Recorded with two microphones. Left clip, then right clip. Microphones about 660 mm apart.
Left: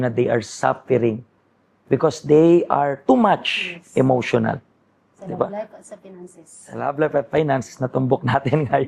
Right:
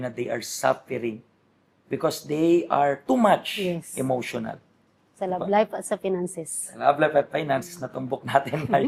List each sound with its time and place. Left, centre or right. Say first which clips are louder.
0.0 s speech: left 10 dB; left
5.5 s a woman's voice: right 9 dB; right
6.7 s speech: even; left